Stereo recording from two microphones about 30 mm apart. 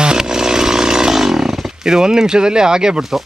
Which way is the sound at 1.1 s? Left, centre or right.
Centre.